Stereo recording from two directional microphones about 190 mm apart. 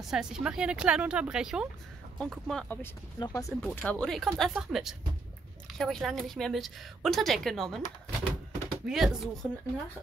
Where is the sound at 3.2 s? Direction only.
15° left (ahead or behind).